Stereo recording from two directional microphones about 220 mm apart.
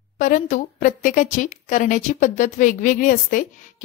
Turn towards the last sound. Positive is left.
turn(degrees=35)  # may be behind; listen again after turning